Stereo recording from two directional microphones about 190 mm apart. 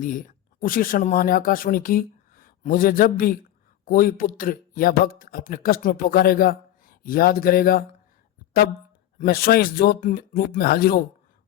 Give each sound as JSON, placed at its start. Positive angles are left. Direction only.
{"t": 0.0, "sound": "speech", "side_deg": 45}
{"t": 9.1, "sound": "speech", "side_deg": 50}